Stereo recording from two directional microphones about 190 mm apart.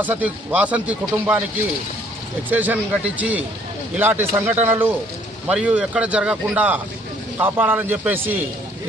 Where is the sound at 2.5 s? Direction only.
10° right (ahead or behind).